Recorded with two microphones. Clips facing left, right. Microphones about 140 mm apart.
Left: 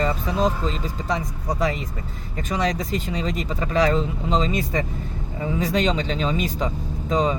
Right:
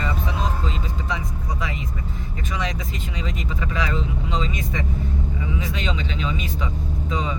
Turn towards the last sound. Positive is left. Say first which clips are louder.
# left 5 dB
turn(degrees=40)  # may be behind; listen again after turning